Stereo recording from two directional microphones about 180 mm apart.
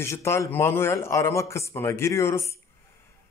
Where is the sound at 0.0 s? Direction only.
15° left (ahead or behind).